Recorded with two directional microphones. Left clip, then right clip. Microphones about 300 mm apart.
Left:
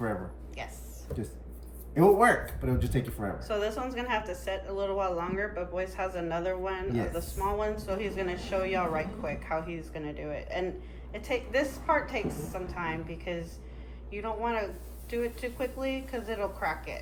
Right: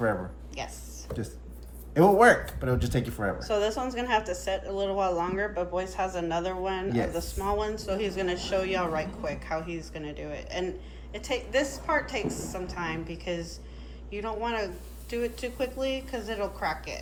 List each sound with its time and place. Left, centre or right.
0.6 s speech: centre
2.0 s speech: centre
3.3 s speech: centre